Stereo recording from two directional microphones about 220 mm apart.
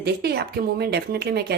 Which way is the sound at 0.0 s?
45° right (ahead or behind).